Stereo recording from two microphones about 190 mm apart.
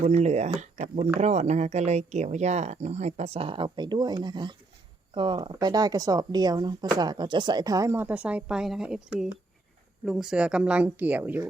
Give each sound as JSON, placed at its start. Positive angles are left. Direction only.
{"t": 0.0, "sound": "speech", "side_deg": -35}